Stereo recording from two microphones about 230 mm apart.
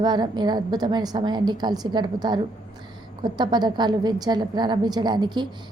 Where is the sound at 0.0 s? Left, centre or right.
Centre.